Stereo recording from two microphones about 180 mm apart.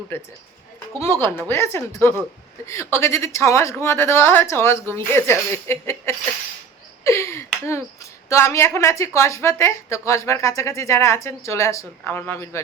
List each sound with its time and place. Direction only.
0.9 s a woman's voice: 15° left (ahead or behind)